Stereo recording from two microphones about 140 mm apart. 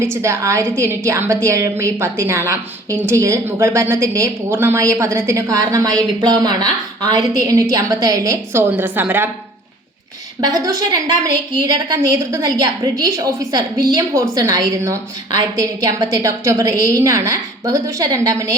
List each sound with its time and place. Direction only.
0.0 s a woman's voice: 20° right (ahead or behind)
10.4 s a woman's voice: 25° right (ahead or behind)